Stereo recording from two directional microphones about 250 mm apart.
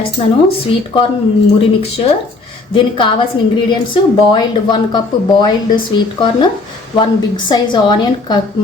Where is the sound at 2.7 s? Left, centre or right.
Centre.